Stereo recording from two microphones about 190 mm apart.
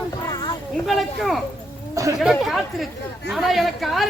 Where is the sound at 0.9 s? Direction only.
Centre (ahead or behind).